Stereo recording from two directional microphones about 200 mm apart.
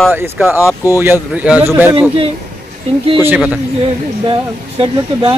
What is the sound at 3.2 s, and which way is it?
Speech, 5° right (ahead or behind).